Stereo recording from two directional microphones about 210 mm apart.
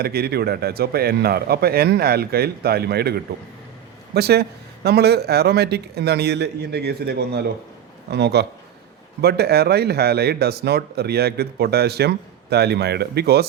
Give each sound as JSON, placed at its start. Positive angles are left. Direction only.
{"t": 0.0, "sound": "speech", "side_deg": -50}